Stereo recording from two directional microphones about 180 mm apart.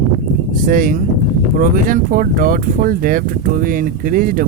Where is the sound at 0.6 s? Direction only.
50° right (ahead or behind).